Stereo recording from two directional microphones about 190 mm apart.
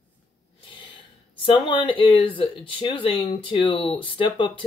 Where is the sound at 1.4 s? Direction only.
25° left (ahead or behind).